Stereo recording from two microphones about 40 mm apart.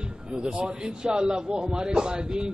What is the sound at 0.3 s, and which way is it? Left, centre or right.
A man's voice, right.